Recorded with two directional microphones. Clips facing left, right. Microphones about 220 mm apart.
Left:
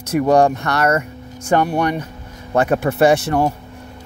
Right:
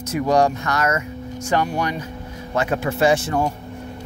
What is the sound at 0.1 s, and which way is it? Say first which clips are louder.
Speech: left 4 dB; 55° left (ahead or behind).